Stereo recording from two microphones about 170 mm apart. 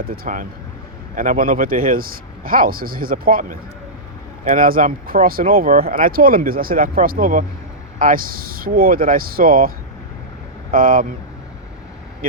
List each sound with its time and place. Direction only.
0.0 s speech: 55° right (ahead or behind)